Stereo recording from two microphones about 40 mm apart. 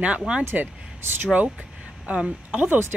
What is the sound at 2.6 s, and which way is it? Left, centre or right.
Speech, right.